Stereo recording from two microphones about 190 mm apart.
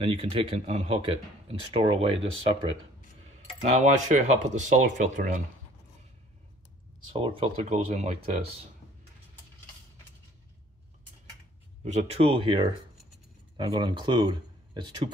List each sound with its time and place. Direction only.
0.0 s speech: 30° right (ahead or behind)
3.7 s speech: 40° right (ahead or behind)
7.1 s speech: 25° right (ahead or behind)
11.8 s speech: 35° right (ahead or behind)